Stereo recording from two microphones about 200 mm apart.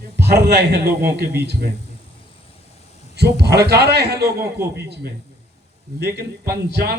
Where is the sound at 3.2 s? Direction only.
55° right (ahead or behind).